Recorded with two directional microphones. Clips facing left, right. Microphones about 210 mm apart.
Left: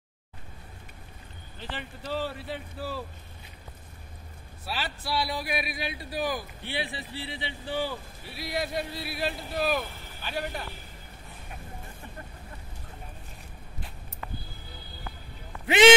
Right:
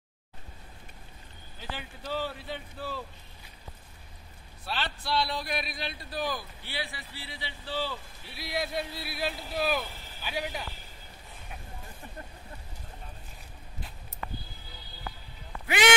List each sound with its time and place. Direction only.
1.6 s speech: centre (ahead or behind)
4.6 s a man's voice: 5° left (ahead or behind)
8.3 s speech: centre (ahead or behind)
15.6 s speech: 25° left (ahead or behind)